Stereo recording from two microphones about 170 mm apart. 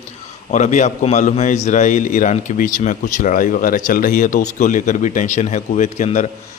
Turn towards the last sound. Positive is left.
turn(degrees=45)  # may be behind; listen again after turning